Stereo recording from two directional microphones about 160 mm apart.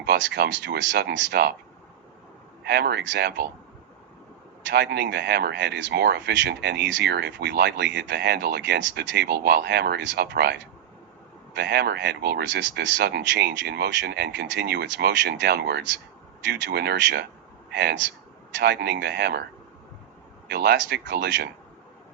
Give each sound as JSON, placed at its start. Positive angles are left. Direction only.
{"t": 0.0, "sound": "speech", "side_deg": -90}
{"t": 2.6, "sound": "speech", "side_deg": -90}
{"t": 4.6, "sound": "a man's voice", "side_deg": -90}
{"t": 20.5, "sound": "speech", "side_deg": -90}